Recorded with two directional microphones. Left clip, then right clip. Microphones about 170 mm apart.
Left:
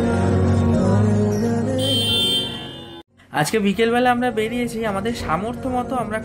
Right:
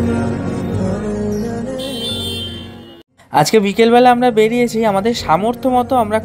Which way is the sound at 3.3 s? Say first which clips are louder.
Right 8 dB; 40° right (ahead or behind).